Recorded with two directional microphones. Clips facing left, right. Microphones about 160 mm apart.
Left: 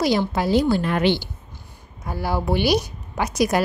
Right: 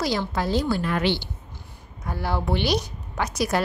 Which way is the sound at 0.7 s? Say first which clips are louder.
Left 4 dB; 25° left (ahead or behind).